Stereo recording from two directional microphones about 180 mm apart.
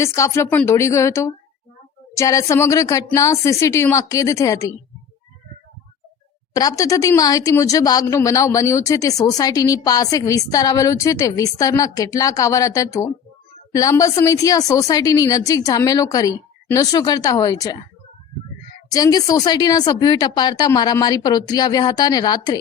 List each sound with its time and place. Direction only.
0.0 s a woman's voice: 15° left (ahead or behind)
6.5 s speech: 20° left (ahead or behind)
18.9 s speech: 20° left (ahead or behind)